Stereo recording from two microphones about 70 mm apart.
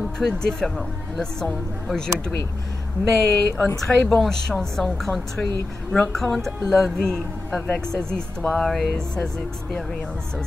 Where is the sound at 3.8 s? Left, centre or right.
Centre.